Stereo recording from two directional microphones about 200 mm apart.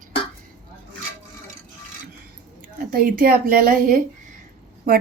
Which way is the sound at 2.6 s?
45° right (ahead or behind).